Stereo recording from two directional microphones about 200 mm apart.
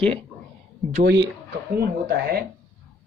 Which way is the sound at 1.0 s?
60° right (ahead or behind).